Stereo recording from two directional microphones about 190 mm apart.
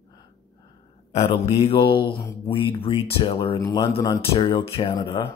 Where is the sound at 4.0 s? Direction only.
20° left (ahead or behind).